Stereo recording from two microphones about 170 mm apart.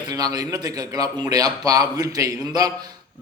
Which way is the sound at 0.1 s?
20° right (ahead or behind).